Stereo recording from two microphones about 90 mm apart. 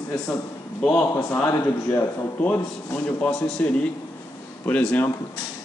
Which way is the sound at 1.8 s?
25° left (ahead or behind).